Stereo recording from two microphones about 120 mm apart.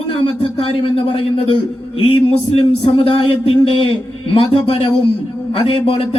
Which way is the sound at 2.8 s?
55° left (ahead or behind).